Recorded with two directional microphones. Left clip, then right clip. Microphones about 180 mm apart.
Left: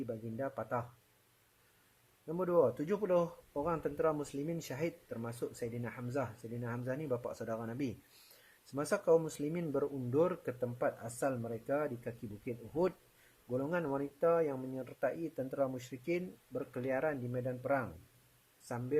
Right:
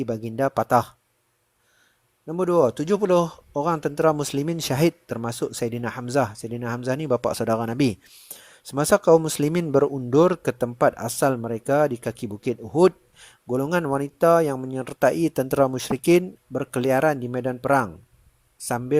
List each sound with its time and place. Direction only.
0.0 s speech: 40° right (ahead or behind)
2.2 s speech: 35° right (ahead or behind); by 17.8 s 50° right (ahead or behind)